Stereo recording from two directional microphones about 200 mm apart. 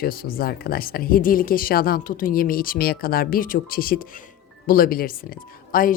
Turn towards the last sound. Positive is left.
turn(degrees=45)  # may be behind; listen again after turning